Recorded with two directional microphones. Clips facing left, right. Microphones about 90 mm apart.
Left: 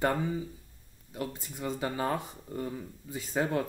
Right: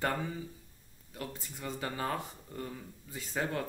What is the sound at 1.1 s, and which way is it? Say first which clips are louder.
Speech: left 5 dB; 20° left (ahead or behind).